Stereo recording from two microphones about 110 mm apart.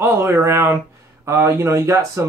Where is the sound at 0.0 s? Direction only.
25° right (ahead or behind).